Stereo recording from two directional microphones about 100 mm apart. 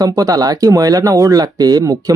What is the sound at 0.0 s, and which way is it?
Speech, 40° right (ahead or behind).